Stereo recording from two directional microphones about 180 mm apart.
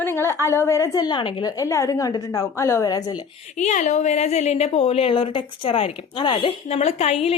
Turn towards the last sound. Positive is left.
turn(degrees=35)  # may be behind; listen again after turning